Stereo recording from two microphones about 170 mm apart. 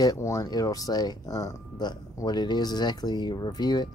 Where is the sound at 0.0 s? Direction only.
20° left (ahead or behind).